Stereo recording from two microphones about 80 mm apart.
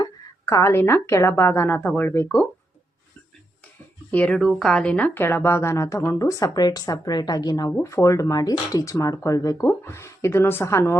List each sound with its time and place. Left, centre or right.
0.0 s a sound: left
0.6 s a woman's voice: left
4.1 s a woman's voice: centre
4.4 s a woman's voice: centre; by 7.7 s left
7.8 s speech: left